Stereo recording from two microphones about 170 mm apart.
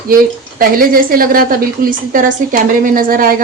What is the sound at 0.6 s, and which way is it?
A woman's voice, 60° right (ahead or behind).